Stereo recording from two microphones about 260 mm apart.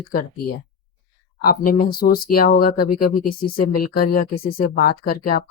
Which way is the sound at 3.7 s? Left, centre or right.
Left.